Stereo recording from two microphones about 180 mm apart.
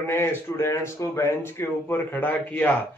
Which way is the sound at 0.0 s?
15° left (ahead or behind).